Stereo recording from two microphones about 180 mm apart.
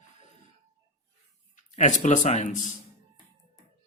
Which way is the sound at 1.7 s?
45° left (ahead or behind).